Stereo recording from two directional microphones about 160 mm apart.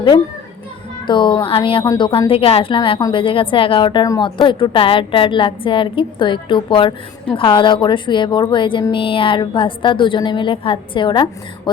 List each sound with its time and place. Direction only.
1.0 s a woman's voice: 30° left (ahead or behind)